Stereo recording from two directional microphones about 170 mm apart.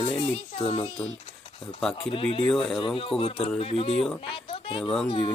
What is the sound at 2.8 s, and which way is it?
Speech, 30° left (ahead or behind).